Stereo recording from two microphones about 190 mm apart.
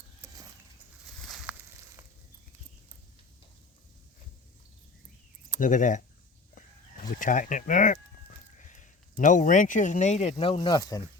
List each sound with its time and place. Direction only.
1.3 s a sound: centre (ahead or behind)
5.5 s speech: 45° left (ahead or behind)
7.2 s speech: 45° left (ahead or behind); by 11.0 s 20° left (ahead or behind)